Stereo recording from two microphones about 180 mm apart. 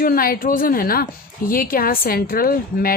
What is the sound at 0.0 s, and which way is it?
A woman's voice, 55° left (ahead or behind).